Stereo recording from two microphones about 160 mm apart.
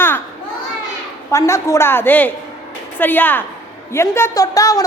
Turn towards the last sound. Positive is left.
turn(degrees=20)  # may be behind; listen again after turning